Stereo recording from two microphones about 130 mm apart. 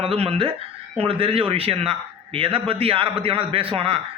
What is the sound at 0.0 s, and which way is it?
A man's voice, 50° right (ahead or behind).